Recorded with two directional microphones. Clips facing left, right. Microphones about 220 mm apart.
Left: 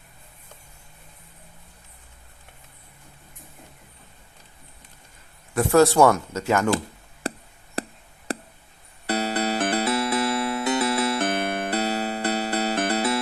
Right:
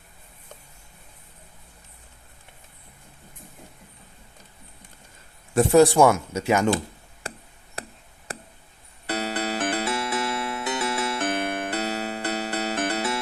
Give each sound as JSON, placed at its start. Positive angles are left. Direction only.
{"t": 5.5, "sound": "speech", "side_deg": -15}
{"t": 9.0, "sound": "music", "side_deg": 35}